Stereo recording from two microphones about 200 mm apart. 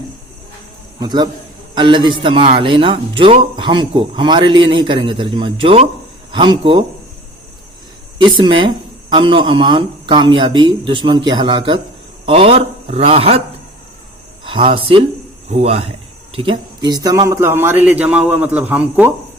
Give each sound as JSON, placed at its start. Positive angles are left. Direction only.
{"t": 0.9, "sound": "speech", "side_deg": -20}
{"t": 8.2, "sound": "a man's voice", "side_deg": -25}
{"t": 14.4, "sound": "speech", "side_deg": -25}